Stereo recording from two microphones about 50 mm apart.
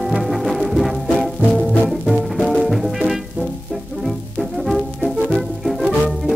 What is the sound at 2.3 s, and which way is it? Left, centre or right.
Music, centre.